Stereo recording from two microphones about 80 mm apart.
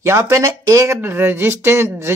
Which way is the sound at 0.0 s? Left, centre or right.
Right.